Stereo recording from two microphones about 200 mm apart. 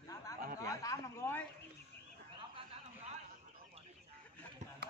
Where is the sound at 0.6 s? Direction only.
15° left (ahead or behind).